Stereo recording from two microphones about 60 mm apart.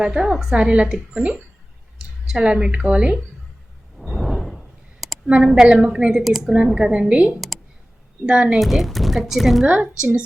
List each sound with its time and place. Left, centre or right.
0.0 s speech: centre
3.9 s a sound: centre
5.4 s speech: centre
8.5 s speech: centre
9.6 s a woman's voice: centre